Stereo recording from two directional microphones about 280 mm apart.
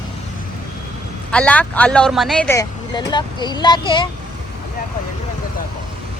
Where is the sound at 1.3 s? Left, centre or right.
Centre.